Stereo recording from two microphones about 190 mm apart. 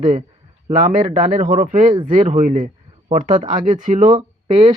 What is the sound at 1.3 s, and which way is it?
A man's voice, 45° right (ahead or behind).